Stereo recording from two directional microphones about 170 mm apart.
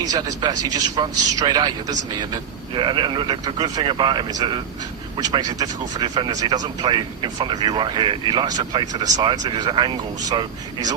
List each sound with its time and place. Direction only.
0.0 s speech: 20° right (ahead or behind)